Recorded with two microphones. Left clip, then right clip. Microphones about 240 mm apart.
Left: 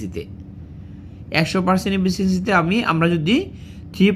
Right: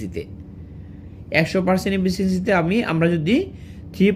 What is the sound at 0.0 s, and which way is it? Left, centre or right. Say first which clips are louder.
Speech: even; centre.